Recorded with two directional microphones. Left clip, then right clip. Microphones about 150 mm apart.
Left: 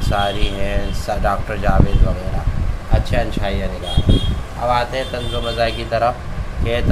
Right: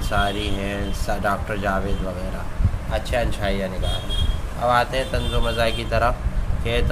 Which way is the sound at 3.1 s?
35° right (ahead or behind).